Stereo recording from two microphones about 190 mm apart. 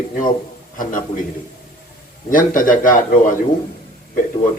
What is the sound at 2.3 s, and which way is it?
Speech, 45° left (ahead or behind).